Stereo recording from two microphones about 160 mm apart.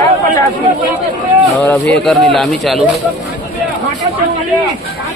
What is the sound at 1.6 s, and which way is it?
Speech, 10° left (ahead or behind).